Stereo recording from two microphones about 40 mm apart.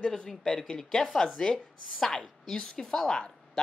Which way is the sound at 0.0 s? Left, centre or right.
Left.